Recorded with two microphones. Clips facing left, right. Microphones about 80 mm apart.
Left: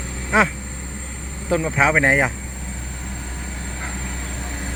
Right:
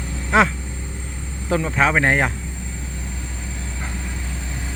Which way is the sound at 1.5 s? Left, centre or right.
Centre.